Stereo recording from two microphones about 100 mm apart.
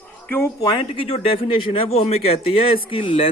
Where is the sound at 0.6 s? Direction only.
50° left (ahead or behind).